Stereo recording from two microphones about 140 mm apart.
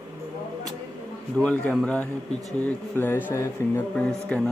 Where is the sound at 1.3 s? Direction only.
10° left (ahead or behind).